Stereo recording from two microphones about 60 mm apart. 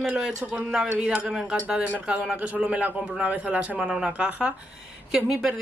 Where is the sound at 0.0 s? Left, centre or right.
Centre.